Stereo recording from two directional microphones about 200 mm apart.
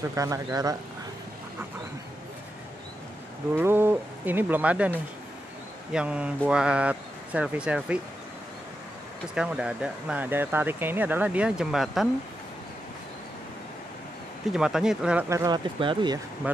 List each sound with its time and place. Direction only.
0.1 s speech: 15° right (ahead or behind)
3.5 s speech: 10° right (ahead or behind)
5.9 s speech: 5° right (ahead or behind)
9.3 s speech: 5° right (ahead or behind)
14.5 s speech: 5° right (ahead or behind); by 16.2 s 25° right (ahead or behind)